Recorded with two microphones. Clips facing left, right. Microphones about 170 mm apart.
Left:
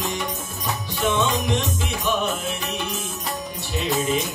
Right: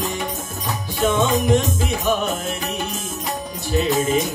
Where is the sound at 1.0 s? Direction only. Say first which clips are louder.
Right 4 dB; 45° right (ahead or behind).